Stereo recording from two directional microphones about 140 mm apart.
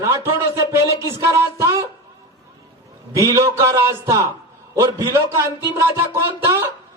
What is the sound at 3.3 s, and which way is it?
Speech, 25° right (ahead or behind).